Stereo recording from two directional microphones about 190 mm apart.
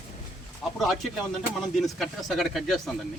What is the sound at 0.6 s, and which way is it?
Speech, centre (ahead or behind).